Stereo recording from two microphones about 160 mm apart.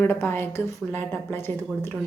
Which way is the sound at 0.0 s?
15° left (ahead or behind).